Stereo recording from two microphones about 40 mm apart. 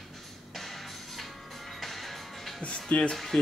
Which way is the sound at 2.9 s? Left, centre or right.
Left.